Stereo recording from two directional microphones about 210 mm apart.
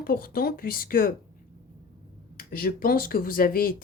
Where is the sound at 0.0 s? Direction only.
45° left (ahead or behind).